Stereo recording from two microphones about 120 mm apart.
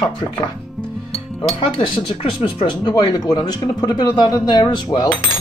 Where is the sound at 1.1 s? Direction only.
50° left (ahead or behind).